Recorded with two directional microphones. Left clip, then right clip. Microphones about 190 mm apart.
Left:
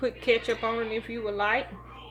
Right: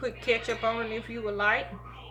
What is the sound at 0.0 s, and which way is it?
A woman's voice, 20° left (ahead or behind).